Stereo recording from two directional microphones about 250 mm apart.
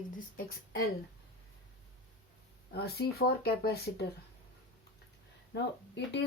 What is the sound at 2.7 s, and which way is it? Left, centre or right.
Speech, left.